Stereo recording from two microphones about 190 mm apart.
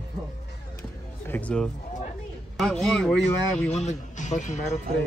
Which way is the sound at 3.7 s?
35° left (ahead or behind).